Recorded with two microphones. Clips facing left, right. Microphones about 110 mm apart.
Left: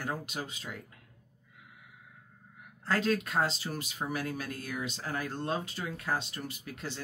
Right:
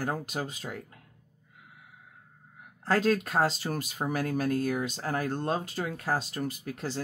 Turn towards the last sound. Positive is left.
turn(degrees=-40)  # may be behind; listen again after turning